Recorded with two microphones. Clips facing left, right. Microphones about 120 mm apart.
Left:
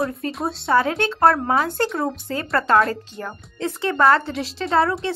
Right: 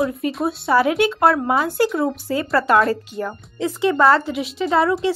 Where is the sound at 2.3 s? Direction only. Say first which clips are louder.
Right 1 dB; 15° right (ahead or behind).